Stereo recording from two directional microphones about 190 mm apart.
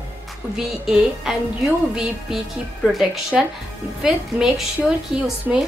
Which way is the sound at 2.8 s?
Centre (ahead or behind).